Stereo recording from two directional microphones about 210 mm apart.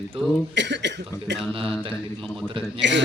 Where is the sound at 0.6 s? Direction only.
55° right (ahead or behind).